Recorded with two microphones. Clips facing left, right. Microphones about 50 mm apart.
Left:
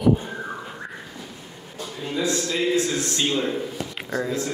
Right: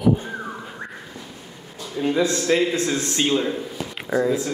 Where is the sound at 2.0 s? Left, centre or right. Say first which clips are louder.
Right 5 dB; right.